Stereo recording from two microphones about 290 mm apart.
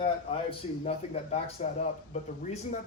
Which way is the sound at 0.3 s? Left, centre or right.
Centre.